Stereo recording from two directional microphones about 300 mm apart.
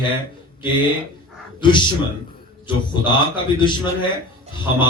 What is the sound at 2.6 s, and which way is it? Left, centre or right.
A man's voice, centre.